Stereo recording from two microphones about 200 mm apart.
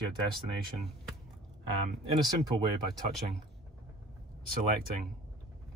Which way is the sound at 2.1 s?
25° right (ahead or behind).